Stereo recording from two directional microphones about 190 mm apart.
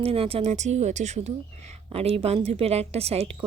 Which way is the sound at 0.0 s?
30° right (ahead or behind).